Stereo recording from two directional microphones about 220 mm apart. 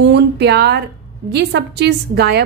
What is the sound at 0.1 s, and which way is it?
A woman's voice, 50° right (ahead or behind).